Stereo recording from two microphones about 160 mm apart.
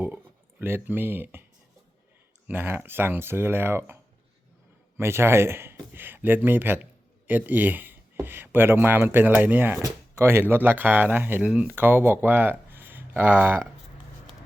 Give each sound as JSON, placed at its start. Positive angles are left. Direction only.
{"t": 0.6, "sound": "speech", "side_deg": -15}
{"t": 2.5, "sound": "speech", "side_deg": -15}
{"t": 4.9, "sound": "speech", "side_deg": -15}